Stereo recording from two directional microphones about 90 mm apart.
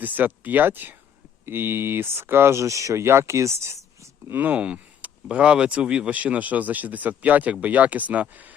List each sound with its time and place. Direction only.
0.0 s speech: 20° right (ahead or behind)
4.4 s speech: 20° right (ahead or behind)